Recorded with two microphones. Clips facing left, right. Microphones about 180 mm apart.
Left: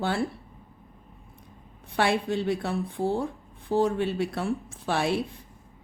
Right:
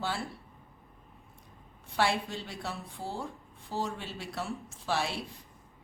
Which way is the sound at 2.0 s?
60° left (ahead or behind).